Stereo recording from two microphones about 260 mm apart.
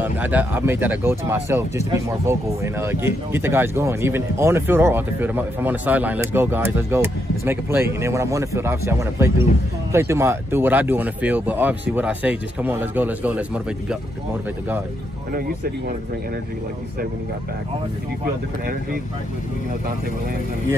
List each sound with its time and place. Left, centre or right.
0.0 s speech: centre